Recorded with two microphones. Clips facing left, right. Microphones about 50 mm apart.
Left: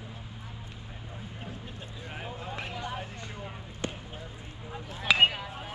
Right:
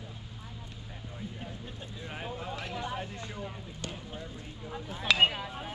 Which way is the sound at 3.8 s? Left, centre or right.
Left.